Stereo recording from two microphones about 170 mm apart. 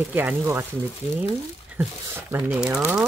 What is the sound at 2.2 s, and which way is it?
Speech, 10° right (ahead or behind).